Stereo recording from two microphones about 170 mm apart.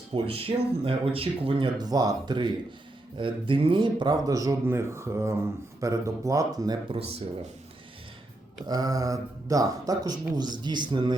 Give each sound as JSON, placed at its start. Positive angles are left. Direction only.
{"t": 0.1, "sound": "speech", "side_deg": -35}
{"t": 8.6, "sound": "speech", "side_deg": -20}